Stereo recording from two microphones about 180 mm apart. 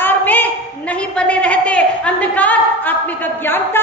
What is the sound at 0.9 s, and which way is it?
A woman's voice, 5° left (ahead or behind).